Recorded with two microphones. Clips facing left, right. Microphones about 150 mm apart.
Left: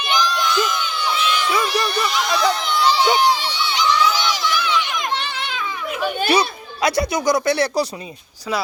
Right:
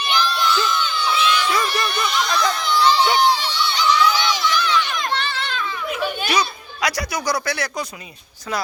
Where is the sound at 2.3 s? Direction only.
15° left (ahead or behind).